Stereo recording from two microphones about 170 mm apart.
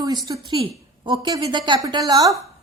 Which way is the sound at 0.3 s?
30° right (ahead or behind).